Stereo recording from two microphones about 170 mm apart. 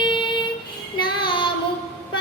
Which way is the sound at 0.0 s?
30° left (ahead or behind).